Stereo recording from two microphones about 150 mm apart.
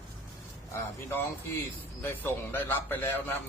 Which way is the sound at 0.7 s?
15° left (ahead or behind).